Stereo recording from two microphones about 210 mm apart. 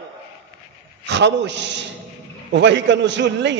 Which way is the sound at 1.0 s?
55° right (ahead or behind).